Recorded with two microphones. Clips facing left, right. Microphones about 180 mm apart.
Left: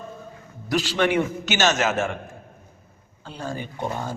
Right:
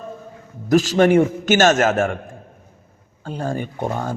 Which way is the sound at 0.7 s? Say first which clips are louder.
Right 8 dB; 45° right (ahead or behind).